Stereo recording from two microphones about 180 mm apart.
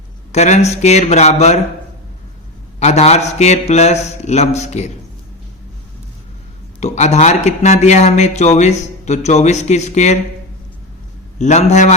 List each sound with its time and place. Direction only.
0.3 s speech: 40° left (ahead or behind)
2.8 s speech: 40° left (ahead or behind)
6.7 s speech: 40° left (ahead or behind)
11.3 s speech: 40° left (ahead or behind)